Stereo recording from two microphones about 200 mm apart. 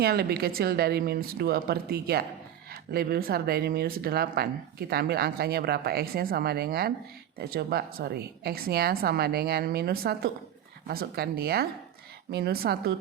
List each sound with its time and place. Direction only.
0.0 s speech: 50° right (ahead or behind)